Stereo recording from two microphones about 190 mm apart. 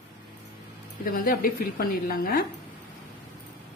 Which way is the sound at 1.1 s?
50° left (ahead or behind).